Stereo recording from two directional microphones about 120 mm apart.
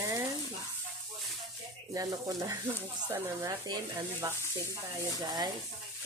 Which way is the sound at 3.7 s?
30° right (ahead or behind).